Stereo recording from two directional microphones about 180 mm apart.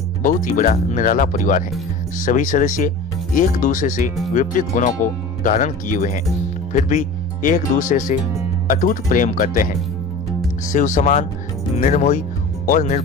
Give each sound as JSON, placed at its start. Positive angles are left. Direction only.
{"t": 0.4, "sound": "speech", "side_deg": 45}
{"t": 10.7, "sound": "speech", "side_deg": 45}